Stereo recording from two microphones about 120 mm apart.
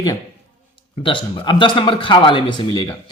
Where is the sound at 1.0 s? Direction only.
45° left (ahead or behind).